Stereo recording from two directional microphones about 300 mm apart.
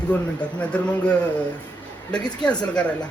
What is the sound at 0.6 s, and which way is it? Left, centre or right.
Speech, centre.